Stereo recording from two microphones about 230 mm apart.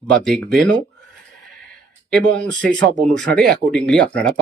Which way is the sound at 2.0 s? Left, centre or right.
Centre.